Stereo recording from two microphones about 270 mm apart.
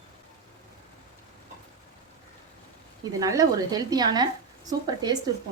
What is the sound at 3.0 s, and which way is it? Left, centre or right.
A woman's voice, centre.